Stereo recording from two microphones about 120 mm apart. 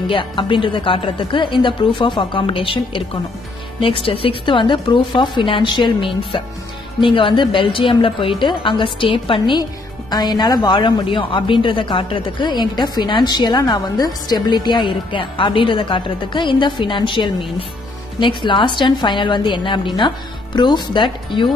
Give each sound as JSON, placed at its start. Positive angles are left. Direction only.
{"t": 0.1, "sound": "speech", "side_deg": 45}